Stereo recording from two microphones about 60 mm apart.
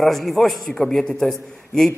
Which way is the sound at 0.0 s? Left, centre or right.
Centre.